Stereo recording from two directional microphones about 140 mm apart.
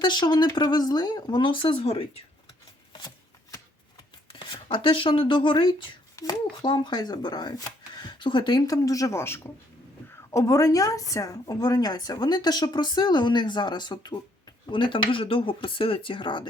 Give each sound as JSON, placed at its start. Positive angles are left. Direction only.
{"t": 0.0, "sound": "speech", "side_deg": 30}
{"t": 4.3, "sound": "a woman's voice", "side_deg": 35}